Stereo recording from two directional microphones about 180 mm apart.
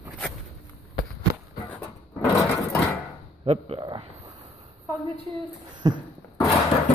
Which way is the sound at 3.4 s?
30° right (ahead or behind).